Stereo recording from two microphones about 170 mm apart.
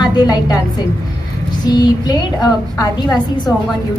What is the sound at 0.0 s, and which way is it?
Speech, 25° left (ahead or behind).